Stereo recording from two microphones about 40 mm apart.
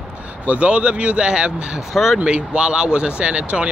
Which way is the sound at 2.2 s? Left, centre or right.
Right.